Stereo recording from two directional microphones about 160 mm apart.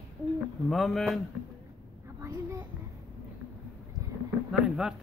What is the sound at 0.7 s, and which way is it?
Speech, centre (ahead or behind).